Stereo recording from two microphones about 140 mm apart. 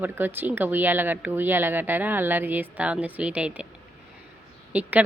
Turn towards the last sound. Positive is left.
turn(degrees=-10)  # may be behind; listen again after turning